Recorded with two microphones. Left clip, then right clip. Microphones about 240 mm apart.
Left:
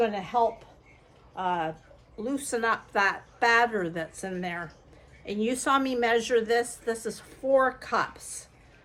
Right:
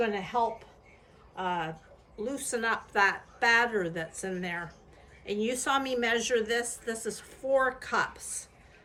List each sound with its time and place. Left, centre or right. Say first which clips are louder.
0.0 s a woman's voice: left 4 dB; centre